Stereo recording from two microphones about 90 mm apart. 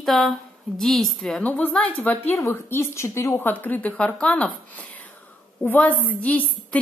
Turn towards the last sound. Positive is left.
turn(degrees=15)  # may be behind; listen again after turning